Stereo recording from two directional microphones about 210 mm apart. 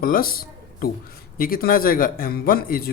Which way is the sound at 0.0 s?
45° left (ahead or behind).